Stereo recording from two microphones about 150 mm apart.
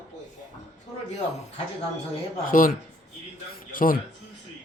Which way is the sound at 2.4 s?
65° left (ahead or behind).